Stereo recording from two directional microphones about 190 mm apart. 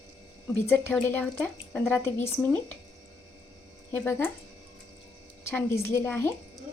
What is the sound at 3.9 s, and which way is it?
Speech, 10° left (ahead or behind).